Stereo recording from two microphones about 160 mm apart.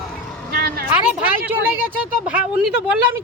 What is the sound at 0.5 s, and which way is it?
Vehicle, 70° right (ahead or behind).